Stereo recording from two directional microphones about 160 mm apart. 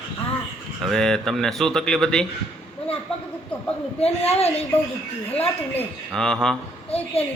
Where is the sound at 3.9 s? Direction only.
40° left (ahead or behind).